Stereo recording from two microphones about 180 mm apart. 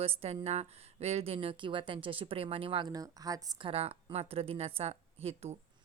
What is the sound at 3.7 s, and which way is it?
A woman's voice, 35° right (ahead or behind).